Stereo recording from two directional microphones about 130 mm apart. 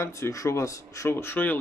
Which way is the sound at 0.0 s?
20° left (ahead or behind).